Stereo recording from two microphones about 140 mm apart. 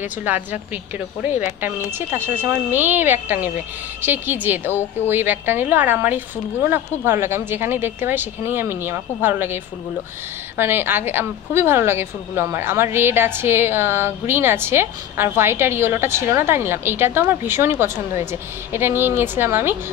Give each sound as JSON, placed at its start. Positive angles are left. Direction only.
{"t": 0.0, "sound": "a woman's voice", "side_deg": -10}
{"t": 10.6, "sound": "a woman's voice", "side_deg": -15}